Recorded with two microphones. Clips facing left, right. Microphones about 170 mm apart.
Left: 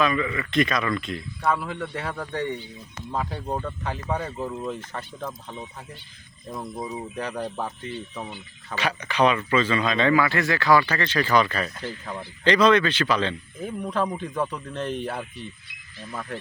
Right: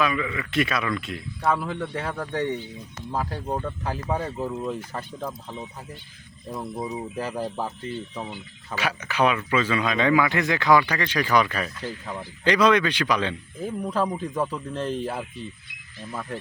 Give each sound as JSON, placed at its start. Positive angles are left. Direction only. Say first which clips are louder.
{"t": 0.0, "sound": "speech", "louder": "left 2 dB", "side_deg": -5}
{"t": 6.7, "sound": "speech", "louder": "right 2 dB", "side_deg": -15}
{"t": 7.2, "sound": "speech", "louder": "right 1 dB", "side_deg": -5}